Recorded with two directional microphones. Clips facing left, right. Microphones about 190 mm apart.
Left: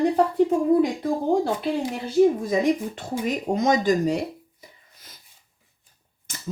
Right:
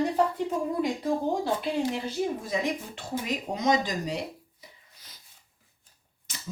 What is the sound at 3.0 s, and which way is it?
Speech, 50° left (ahead or behind).